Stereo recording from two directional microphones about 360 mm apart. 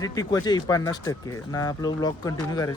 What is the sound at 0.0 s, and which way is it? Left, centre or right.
Speech, centre.